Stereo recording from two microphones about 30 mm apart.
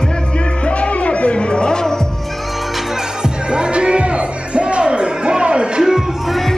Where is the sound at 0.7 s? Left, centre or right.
Left.